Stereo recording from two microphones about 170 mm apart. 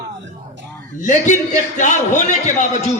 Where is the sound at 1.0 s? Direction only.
45° left (ahead or behind).